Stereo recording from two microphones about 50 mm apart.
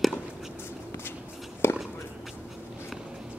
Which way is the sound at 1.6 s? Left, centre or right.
Left.